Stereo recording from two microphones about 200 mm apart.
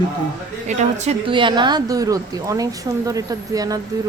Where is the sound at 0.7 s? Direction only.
35° right (ahead or behind); by 3.8 s 20° right (ahead or behind).